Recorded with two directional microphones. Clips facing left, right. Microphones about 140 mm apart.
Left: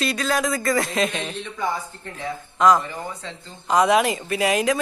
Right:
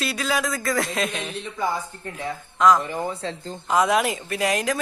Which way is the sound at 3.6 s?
Centre (ahead or behind).